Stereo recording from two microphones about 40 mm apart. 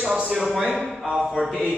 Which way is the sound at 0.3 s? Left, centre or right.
Centre.